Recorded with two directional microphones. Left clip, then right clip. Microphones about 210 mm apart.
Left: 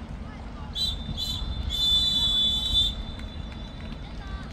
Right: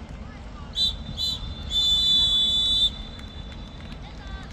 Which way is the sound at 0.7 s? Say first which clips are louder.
Right 4 dB; 20° right (ahead or behind).